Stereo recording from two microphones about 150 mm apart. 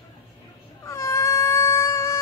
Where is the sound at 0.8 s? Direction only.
20° left (ahead or behind).